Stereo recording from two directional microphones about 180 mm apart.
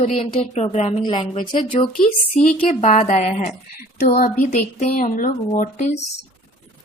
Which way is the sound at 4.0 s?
55° left (ahead or behind).